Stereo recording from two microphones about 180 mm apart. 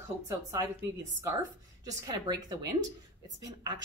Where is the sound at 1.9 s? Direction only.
20° right (ahead or behind).